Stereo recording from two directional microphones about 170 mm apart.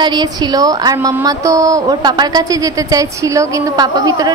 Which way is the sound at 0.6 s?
20° right (ahead or behind).